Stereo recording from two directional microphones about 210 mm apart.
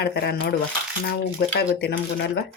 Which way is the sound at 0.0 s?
50° left (ahead or behind).